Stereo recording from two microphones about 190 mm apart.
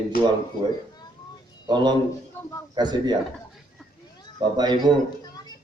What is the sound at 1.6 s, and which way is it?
A man's voice, 20° right (ahead or behind).